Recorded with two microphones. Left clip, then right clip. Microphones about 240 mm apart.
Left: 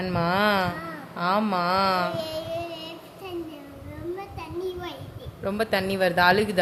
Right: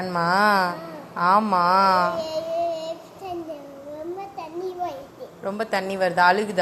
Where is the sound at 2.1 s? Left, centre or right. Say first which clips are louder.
Right 4 dB; left.